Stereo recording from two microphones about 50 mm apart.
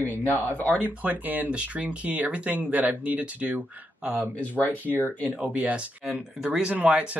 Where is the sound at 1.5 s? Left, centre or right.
Right.